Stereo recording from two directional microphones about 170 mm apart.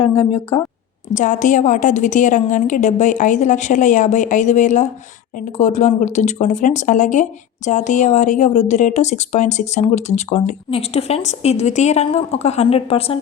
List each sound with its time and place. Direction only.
0.0 s a woman's voice: 35° left (ahead or behind)
1.1 s a woman's voice: 45° left (ahead or behind)